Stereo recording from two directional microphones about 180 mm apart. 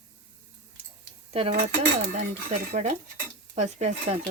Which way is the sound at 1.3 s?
30° right (ahead or behind).